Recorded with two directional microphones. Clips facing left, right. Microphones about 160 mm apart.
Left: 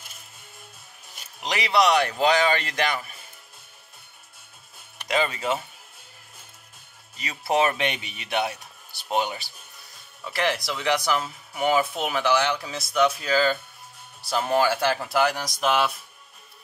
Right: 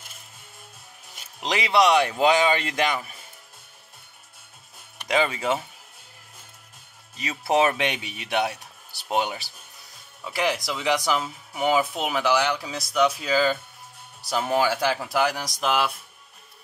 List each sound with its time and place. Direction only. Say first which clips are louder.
1.4 s speech: right 1 dB; 20° right (ahead or behind)
5.1 s speech: right 1 dB; 15° right (ahead or behind)
7.2 s speech: right 1 dB; 20° right (ahead or behind); by 15.9 s 5° right (ahead or behind)